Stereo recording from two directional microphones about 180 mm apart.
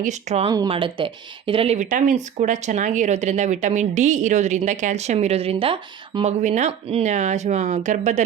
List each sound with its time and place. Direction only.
0.0 s speech: 40° right (ahead or behind)
0.4 s speech: 20° right (ahead or behind)
6.4 s speech: 40° right (ahead or behind)